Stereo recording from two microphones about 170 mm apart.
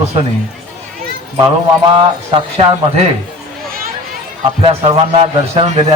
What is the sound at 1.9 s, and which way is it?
Speech, 25° right (ahead or behind).